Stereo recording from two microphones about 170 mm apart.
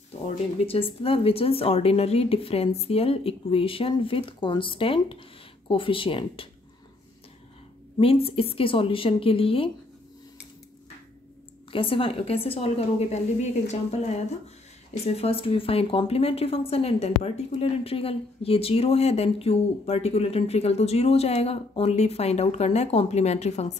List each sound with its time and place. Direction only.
0.7 s speech: 35° left (ahead or behind)
8.0 s speech: 35° left (ahead or behind)
11.7 s speech: 30° left (ahead or behind)